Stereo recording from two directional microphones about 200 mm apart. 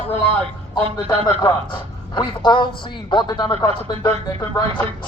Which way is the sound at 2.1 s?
25° left (ahead or behind).